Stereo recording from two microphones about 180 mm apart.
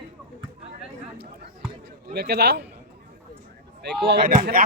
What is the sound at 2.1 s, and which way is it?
Speech, 65° right (ahead or behind).